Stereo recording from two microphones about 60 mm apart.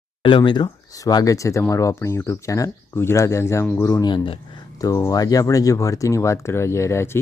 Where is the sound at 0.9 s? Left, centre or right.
Left.